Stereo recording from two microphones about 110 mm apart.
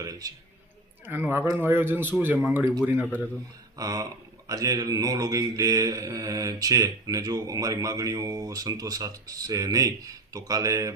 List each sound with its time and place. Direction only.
0.0 s a sound: 35° right (ahead or behind)
1.0 s a man's voice: 20° right (ahead or behind)
3.8 s speech: 35° right (ahead or behind)